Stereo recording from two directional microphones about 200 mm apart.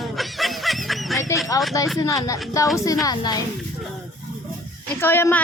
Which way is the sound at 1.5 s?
15° left (ahead or behind).